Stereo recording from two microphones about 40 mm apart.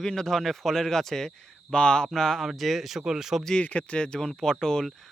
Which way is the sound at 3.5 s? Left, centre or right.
Left.